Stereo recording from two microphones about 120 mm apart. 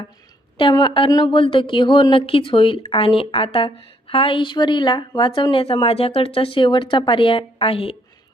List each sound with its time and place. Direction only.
0.7 s a woman's voice: 40° left (ahead or behind)